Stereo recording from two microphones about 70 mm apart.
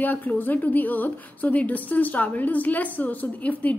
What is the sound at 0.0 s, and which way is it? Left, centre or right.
A woman's voice, left.